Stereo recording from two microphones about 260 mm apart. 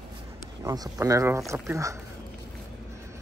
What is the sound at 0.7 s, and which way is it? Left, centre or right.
Speech, centre.